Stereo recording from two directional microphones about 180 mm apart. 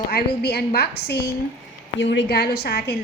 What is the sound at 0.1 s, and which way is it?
A woman's voice, 65° left (ahead or behind).